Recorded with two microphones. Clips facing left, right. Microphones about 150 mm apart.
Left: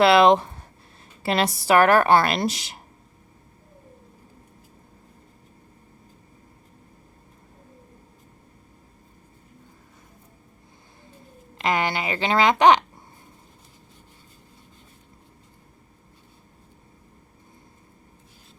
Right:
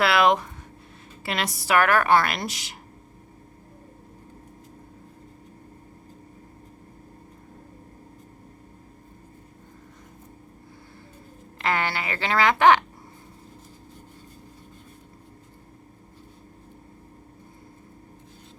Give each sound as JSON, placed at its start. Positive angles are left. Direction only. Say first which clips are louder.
{"t": 0.0, "sound": "a woman's voice", "louder": "left 5 dB", "side_deg": 25}
{"t": 11.5, "sound": "speech", "louder": "left 2 dB", "side_deg": 15}